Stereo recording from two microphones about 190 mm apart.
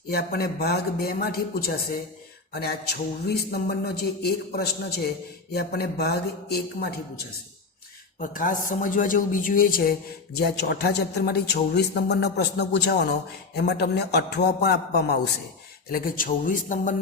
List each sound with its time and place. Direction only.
0.1 s a man's voice: 55° left (ahead or behind)
8.2 s a man's voice: 45° left (ahead or behind)